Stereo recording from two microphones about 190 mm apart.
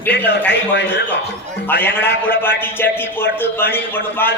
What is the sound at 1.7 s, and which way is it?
A man's voice, 10° left (ahead or behind).